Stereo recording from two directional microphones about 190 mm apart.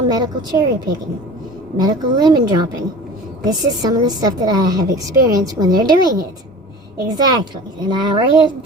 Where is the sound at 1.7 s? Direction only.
20° right (ahead or behind).